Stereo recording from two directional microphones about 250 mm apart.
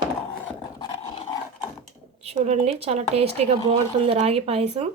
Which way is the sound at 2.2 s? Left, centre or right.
Right.